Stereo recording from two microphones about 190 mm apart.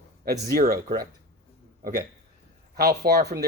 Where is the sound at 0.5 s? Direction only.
50° right (ahead or behind).